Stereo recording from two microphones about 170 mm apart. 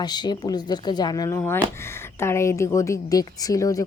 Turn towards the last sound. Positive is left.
turn(degrees=20)  # may be behind; listen again after turning